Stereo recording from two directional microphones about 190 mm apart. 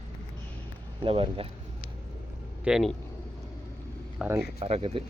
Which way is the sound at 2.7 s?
Centre (ahead or behind).